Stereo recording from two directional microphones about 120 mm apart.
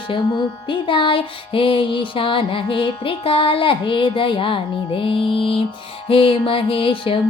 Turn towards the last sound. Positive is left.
turn(degrees=50)  # may be behind; listen again after turning